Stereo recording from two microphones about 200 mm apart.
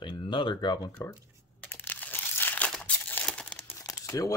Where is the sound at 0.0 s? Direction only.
25° left (ahead or behind).